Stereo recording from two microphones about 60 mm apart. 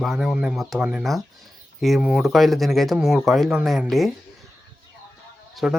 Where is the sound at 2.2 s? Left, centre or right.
Centre.